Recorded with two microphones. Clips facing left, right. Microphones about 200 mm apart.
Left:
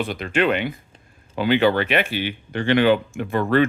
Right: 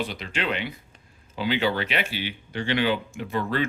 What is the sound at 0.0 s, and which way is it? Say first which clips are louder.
Speech: left 8 dB; 55° left (ahead or behind).